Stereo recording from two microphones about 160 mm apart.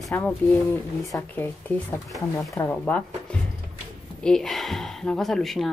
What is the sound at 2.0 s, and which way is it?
Speech, centre (ahead or behind).